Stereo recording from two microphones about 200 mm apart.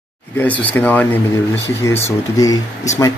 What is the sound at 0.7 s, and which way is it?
Speech, 10° left (ahead or behind).